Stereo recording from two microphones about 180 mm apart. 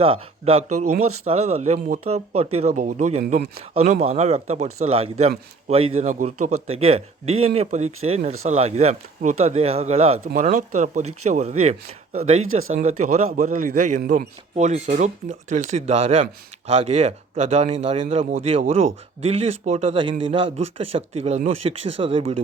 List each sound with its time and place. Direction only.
0.0 s a man's voice: 30° right (ahead or behind)